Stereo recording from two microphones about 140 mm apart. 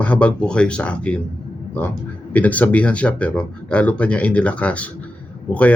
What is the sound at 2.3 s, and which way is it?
Speech, 10° left (ahead or behind).